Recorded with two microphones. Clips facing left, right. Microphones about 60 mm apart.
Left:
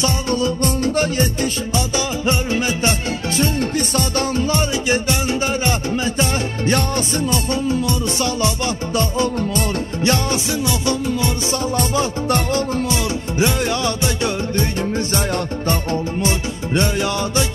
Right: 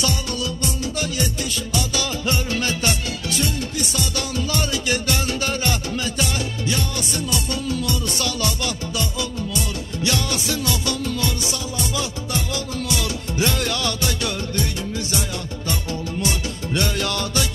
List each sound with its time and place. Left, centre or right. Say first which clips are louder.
0.0 s music: left 6 dB; left
4.5 s music: left 4 dB; left
6.6 s music: left 9 dB; left
8.9 s music: left 7 dB; left
11.7 s music: left 7 dB; left